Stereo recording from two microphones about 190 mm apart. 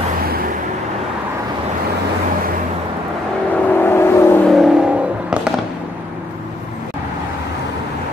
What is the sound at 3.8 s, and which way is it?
Vehicle, 10° left (ahead or behind).